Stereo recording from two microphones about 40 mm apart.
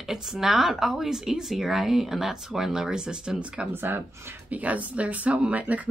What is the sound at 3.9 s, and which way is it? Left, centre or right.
Speech, right.